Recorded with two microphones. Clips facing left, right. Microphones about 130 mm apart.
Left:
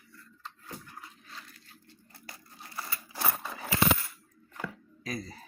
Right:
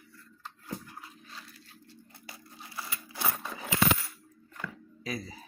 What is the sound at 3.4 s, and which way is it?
Coin, centre (ahead or behind).